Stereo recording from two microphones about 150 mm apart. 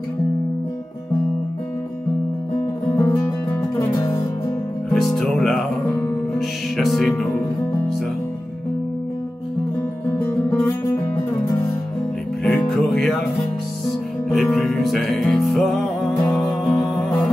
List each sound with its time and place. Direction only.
2.9 s music: 15° left (ahead or behind)
4.9 s music: 5° left (ahead or behind)
12.4 s music: 5° left (ahead or behind)